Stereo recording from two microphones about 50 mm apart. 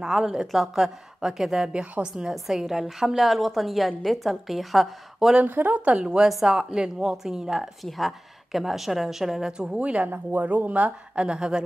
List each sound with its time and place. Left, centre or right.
0.0 s a woman's voice: centre
1.7 s a woman's voice: right
2.2 s a woman's voice: centre
5.4 s speech: right
5.8 s a woman's voice: right
6.2 s a woman's voice: centre
7.8 s a woman's voice: centre
9.8 s a woman's voice: right
11.1 s a woman's voice: centre